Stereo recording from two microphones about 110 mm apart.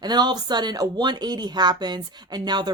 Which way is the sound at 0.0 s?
40° right (ahead or behind).